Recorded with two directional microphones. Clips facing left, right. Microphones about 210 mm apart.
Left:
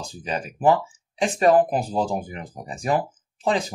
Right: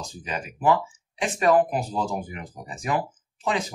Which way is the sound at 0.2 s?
35° left (ahead or behind).